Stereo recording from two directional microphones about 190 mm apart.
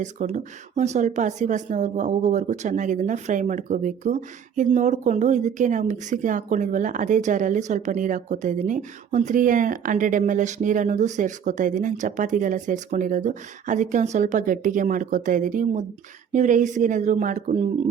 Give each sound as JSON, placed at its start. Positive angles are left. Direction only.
{"t": 0.0, "sound": "speech", "side_deg": -40}